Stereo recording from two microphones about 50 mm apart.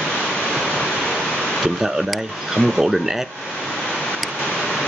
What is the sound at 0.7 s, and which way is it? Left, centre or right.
Waterfall, centre.